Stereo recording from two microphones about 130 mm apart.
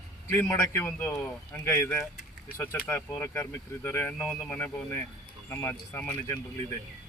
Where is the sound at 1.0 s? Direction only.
10° left (ahead or behind).